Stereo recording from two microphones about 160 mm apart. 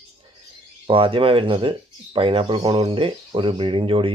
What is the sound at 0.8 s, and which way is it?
Speech, 35° right (ahead or behind).